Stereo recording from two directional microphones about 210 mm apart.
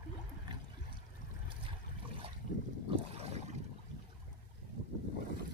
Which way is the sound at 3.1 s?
30° right (ahead or behind).